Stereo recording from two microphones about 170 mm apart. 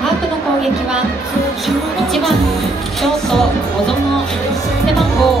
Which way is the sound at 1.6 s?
Centre (ahead or behind).